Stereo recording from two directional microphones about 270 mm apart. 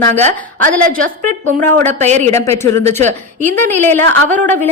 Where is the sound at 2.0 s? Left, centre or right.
Right.